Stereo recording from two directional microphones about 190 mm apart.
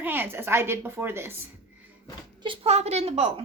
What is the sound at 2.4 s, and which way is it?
Speech, 35° right (ahead or behind).